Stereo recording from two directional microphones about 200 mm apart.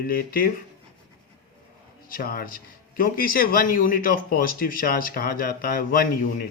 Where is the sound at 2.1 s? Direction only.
45° left (ahead or behind).